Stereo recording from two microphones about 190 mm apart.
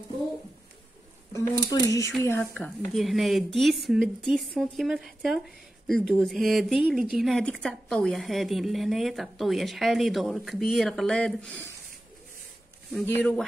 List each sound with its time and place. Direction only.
1.3 s speech: 15° left (ahead or behind)
12.9 s speech: 5° left (ahead or behind)